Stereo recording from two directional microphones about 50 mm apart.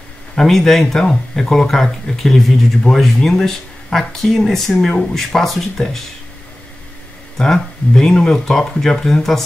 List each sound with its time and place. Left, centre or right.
0.4 s a man's voice: centre
7.3 s speech: centre